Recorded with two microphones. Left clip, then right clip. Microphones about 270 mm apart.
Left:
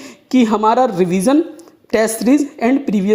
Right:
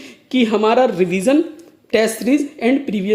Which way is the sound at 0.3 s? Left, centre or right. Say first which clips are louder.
Left 2 dB; left.